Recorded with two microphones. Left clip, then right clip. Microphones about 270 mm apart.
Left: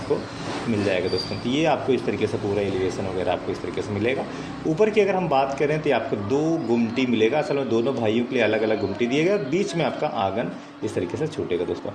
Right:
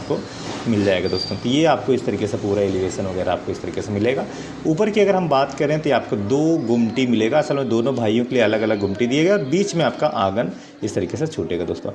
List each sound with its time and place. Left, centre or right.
1.5 s speech: right
3.8 s a man's voice: right